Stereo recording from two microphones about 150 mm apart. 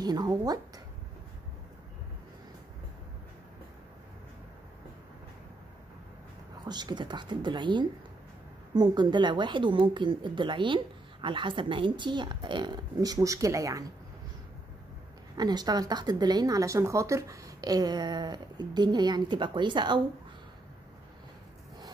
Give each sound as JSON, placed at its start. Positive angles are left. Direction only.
{"t": 0.0, "sound": "speech", "side_deg": -25}
{"t": 6.6, "sound": "speech", "side_deg": -30}
{"t": 15.3, "sound": "speech", "side_deg": -25}